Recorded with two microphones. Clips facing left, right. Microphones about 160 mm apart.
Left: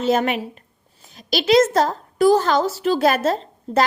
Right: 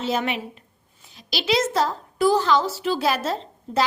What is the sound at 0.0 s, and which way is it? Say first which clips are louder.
A woman's voice: left 6 dB; 50° left (ahead or behind).